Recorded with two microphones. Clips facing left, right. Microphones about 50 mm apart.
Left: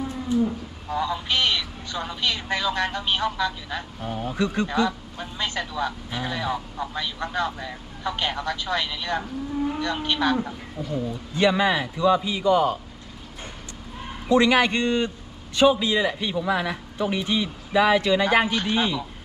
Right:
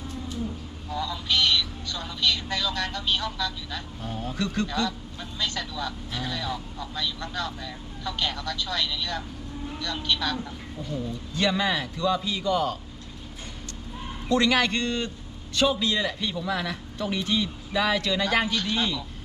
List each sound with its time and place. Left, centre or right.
0.4 s a man's voice: left
14.3 s a man's voice: centre